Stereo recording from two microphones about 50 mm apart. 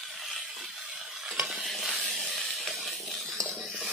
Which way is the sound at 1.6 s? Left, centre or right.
Centre.